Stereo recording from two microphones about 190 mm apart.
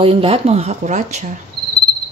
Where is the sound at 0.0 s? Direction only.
30° right (ahead or behind).